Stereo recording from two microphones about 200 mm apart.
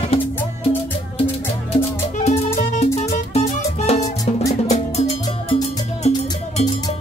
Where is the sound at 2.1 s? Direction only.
35° left (ahead or behind).